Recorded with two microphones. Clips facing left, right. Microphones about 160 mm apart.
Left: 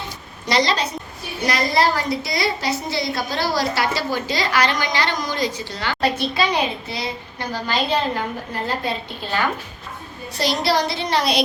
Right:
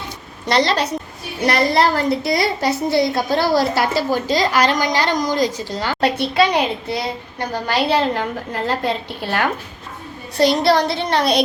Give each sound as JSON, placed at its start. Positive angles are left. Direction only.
{"t": 0.4, "sound": "a child's voice", "side_deg": -55}
{"t": 6.0, "sound": "a child's voice", "side_deg": -65}
{"t": 8.6, "sound": "a woman's voice", "side_deg": -65}
{"t": 10.3, "sound": "a child's voice", "side_deg": -55}